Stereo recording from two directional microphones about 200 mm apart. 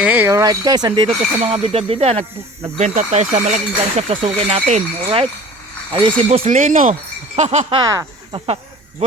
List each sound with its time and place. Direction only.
0.0 s speech: 10° right (ahead or behind); by 7.8 s 35° right (ahead or behind)
7.8 s speech: 20° right (ahead or behind)